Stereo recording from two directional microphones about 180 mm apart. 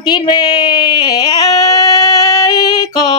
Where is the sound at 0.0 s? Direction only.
25° left (ahead or behind).